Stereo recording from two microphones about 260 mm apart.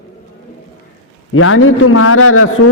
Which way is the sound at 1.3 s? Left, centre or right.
Left.